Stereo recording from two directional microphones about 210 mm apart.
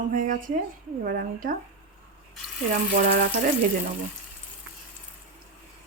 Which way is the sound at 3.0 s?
50° right (ahead or behind).